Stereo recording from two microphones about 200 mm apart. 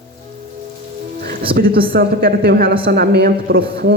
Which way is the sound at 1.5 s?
50° right (ahead or behind).